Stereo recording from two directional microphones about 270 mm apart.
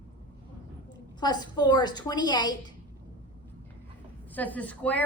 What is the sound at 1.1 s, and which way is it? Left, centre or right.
A woman's voice, centre.